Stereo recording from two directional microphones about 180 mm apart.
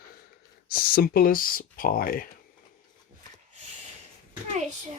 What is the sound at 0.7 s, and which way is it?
Speech, 55° left (ahead or behind).